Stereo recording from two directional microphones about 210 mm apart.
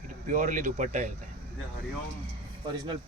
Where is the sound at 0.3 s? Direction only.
35° right (ahead or behind).